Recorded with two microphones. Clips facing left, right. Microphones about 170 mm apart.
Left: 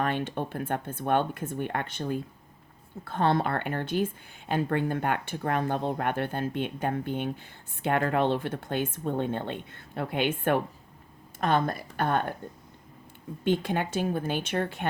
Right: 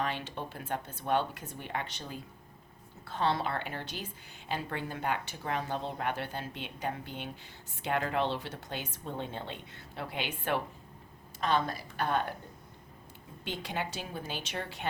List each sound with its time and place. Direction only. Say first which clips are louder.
0.0 s speech: left 6 dB; 55° left (ahead or behind)
13.4 s speech: left 10 dB; 50° left (ahead or behind)